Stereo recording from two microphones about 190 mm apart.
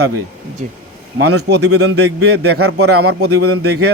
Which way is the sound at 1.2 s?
60° right (ahead or behind).